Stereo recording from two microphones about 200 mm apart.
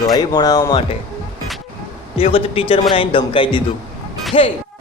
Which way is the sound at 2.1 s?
30° left (ahead or behind).